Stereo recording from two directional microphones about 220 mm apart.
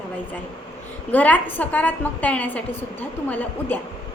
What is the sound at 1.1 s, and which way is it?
A woman's voice, 5° left (ahead or behind).